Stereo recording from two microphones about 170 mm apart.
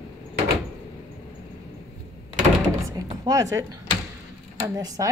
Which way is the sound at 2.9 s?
25° right (ahead or behind).